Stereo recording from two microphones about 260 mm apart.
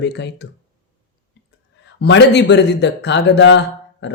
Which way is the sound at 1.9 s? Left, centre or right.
Left.